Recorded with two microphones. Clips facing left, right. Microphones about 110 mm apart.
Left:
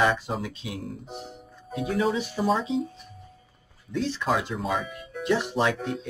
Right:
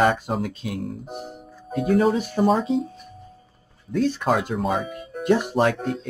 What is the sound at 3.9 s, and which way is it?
Speech, 50° right (ahead or behind).